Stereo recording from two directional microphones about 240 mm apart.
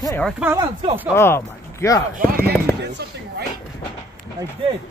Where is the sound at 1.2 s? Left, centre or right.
Centre.